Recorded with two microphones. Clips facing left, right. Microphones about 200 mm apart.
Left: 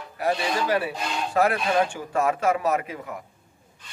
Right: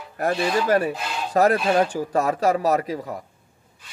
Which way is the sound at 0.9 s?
5° right (ahead or behind).